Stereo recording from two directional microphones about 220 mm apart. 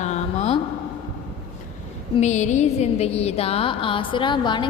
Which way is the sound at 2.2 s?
30° left (ahead or behind).